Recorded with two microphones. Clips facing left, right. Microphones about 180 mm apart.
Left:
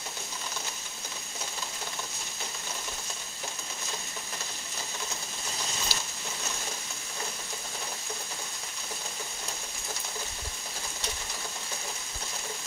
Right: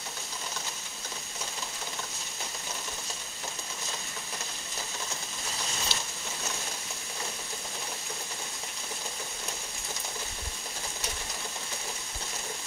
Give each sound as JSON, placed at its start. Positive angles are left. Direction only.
{"t": 5.9, "sound": "boat", "side_deg": -25}